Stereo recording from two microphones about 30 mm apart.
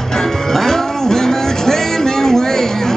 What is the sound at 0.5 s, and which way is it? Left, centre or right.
Music, centre.